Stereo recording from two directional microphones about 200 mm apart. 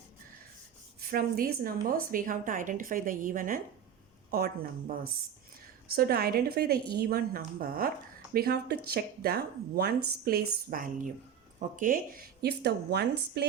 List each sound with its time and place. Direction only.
1.1 s a woman's voice: 50° right (ahead or behind)